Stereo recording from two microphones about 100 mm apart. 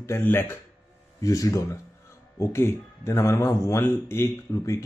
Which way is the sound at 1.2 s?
35° left (ahead or behind).